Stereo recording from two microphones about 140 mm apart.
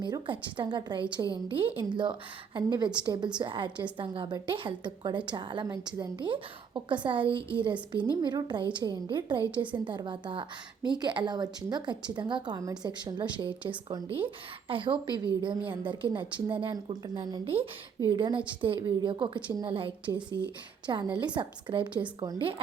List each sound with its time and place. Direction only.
0.0 s a woman's voice: 35° right (ahead or behind)